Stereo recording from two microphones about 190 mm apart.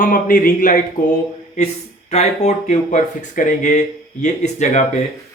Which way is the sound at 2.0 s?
35° left (ahead or behind).